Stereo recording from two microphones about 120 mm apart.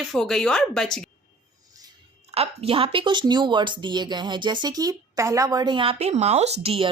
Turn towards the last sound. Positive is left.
turn(degrees=-55)  # may be behind; listen again after turning